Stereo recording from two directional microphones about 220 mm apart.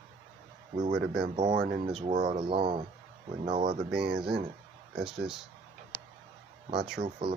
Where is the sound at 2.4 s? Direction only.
25° right (ahead or behind).